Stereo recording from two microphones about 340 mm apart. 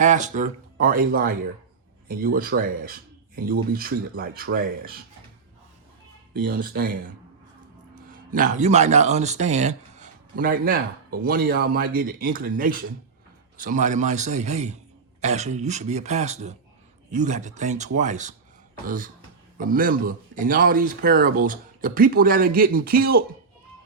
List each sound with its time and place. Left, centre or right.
0.0 s speech: right
6.5 s speech: right
8.1 s speech: right